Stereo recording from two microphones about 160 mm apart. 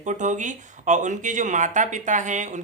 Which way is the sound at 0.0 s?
50° right (ahead or behind).